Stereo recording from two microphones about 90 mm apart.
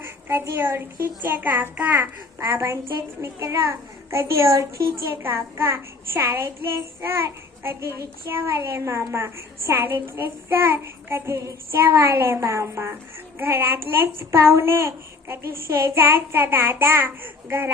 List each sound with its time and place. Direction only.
0.5 s child singing: 25° right (ahead or behind)
2.5 s a child's voice: 35° right (ahead or behind)
5.1 s child singing: 25° right (ahead or behind)